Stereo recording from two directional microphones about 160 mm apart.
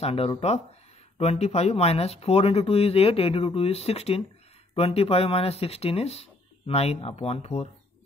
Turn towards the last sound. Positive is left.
turn(degrees=40)  # may be behind; listen again after turning